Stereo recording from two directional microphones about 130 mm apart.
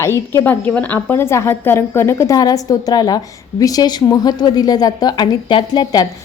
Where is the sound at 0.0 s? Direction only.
20° left (ahead or behind).